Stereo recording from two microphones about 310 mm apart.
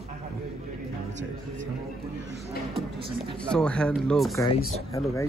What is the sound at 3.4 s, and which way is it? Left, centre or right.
Speech, centre.